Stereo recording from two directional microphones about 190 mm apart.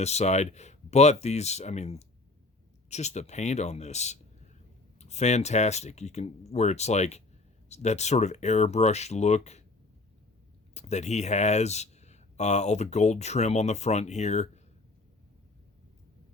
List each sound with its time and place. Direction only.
0.0 s speech: 35° left (ahead or behind)
10.8 s speech: 35° left (ahead or behind)